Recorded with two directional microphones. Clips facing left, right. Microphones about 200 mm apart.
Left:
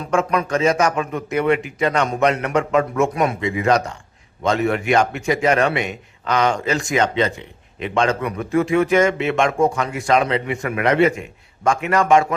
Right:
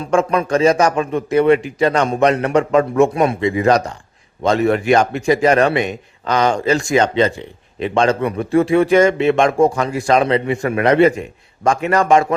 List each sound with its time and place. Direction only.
0.1 s a man's voice: 30° right (ahead or behind)